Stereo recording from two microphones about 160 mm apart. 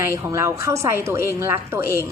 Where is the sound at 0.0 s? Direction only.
20° right (ahead or behind).